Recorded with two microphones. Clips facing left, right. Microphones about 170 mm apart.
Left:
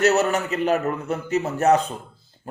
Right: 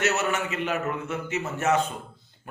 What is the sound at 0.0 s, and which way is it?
A man's voice, 35° left (ahead or behind).